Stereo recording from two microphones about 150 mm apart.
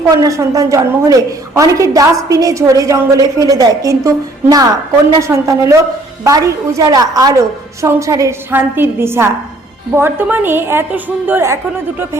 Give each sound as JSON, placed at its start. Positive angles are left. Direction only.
{"t": 0.1, "sound": "a man's voice", "side_deg": -20}